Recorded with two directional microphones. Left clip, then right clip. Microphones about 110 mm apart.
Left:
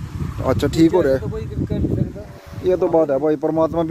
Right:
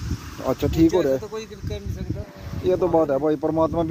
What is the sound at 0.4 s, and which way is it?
Speech, 30° left (ahead or behind).